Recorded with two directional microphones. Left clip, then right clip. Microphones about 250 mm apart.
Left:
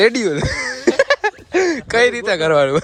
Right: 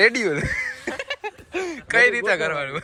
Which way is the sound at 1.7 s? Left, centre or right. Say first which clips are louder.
Left 3 dB; centre.